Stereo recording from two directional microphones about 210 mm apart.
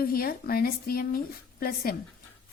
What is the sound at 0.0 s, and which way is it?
A woman's voice, 45° left (ahead or behind).